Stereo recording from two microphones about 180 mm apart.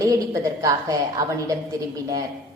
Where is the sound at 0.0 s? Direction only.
20° right (ahead or behind).